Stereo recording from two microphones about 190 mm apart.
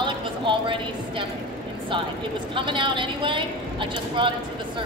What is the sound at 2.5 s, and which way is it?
A woman's voice, 25° right (ahead or behind).